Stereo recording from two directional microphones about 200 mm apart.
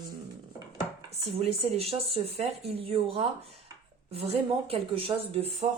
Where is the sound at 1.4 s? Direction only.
30° right (ahead or behind).